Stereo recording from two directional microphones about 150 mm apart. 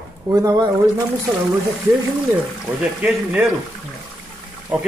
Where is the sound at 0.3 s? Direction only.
20° right (ahead or behind).